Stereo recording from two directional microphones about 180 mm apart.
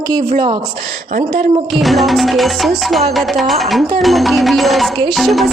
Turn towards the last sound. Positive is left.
turn(degrees=0)  # may be behind; listen again after turning